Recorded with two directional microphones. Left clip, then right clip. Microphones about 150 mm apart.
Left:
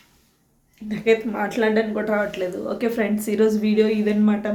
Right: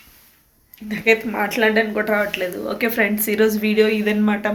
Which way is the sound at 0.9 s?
10° left (ahead or behind).